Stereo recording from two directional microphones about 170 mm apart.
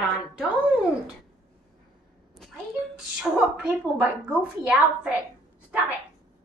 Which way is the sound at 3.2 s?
10° right (ahead or behind).